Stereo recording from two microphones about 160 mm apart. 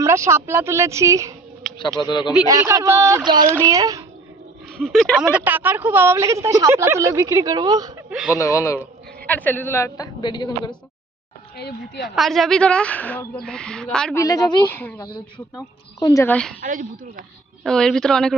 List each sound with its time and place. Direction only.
0.0 s a woman's voice: 15° right (ahead or behind)
2.0 s a woman's voice: 25° left (ahead or behind)
2.5 s speech: 20° right (ahead or behind)
4.8 s a woman's voice: 5° left (ahead or behind); by 7.9 s 25° right (ahead or behind)
8.1 s speech: 5° right (ahead or behind)
8.4 s a woman's voice: 20° left (ahead or behind)
11.5 s speech: 90° left
12.0 s speech: centre (ahead or behind)
14.2 s a woman's voice: 20° left (ahead or behind)
16.0 s a woman's voice: 25° left (ahead or behind)
16.2 s a woman's voice: 5° left (ahead or behind)
16.6 s speech: 55° right (ahead or behind)
17.6 s speech: 5° left (ahead or behind)